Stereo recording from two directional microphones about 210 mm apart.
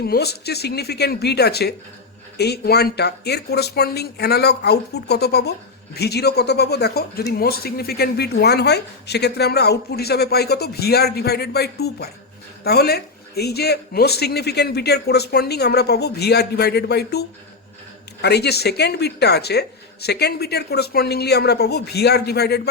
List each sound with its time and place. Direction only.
0.0 s speech: 50° left (ahead or behind)